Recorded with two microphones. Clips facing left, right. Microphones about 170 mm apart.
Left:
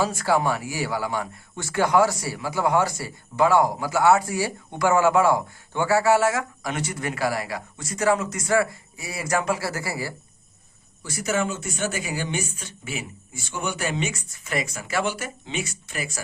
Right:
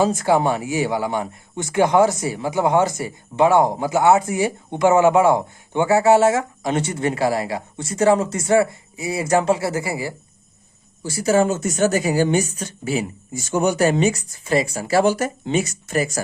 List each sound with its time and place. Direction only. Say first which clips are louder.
0.0 s speech: right 5 dB; 20° right (ahead or behind)
11.0 s a woman's voice: right 8 dB; 30° right (ahead or behind)